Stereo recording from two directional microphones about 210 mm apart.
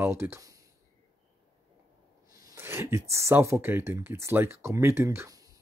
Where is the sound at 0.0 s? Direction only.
10° right (ahead or behind).